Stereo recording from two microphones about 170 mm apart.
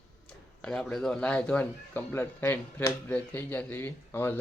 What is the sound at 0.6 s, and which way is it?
Speech, 5° left (ahead or behind).